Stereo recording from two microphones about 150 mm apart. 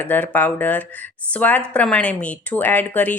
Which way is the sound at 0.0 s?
10° left (ahead or behind).